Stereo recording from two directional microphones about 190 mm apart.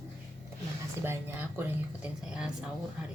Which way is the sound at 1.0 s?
10° right (ahead or behind).